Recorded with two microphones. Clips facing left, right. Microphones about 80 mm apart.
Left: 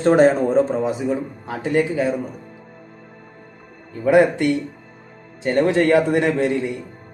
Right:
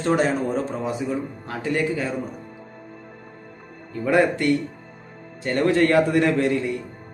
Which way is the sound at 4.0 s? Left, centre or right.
Centre.